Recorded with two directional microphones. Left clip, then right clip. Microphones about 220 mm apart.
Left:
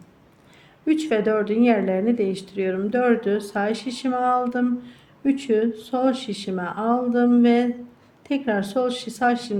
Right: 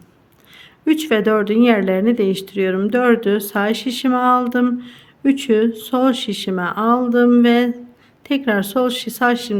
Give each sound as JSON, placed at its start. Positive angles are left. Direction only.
{"t": 0.5, "sound": "speech", "side_deg": -35}